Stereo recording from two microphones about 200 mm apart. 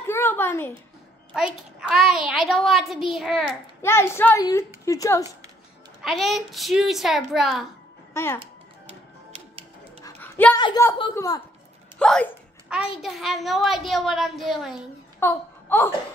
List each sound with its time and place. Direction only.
0.0 s a sound: 10° left (ahead or behind)
1.3 s a child's voice: 5° right (ahead or behind)
3.8 s a woman's voice: 10° left (ahead or behind)
6.0 s a child's voice: centre (ahead or behind)
8.1 s speech: 10° left (ahead or behind)
10.0 s dog: 10° left (ahead or behind)
10.6 s a woman's voice: 15° left (ahead or behind)
12.0 s a child's voice: 5° left (ahead or behind)
15.1 s a sound: 10° left (ahead or behind)